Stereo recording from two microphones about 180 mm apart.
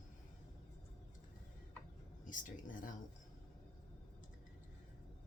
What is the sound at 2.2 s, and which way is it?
Speech, 45° left (ahead or behind).